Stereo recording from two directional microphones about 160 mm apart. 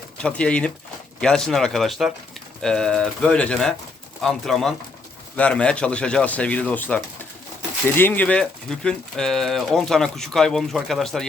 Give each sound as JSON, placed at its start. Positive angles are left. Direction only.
{"t": 0.2, "sound": "speech", "side_deg": 5}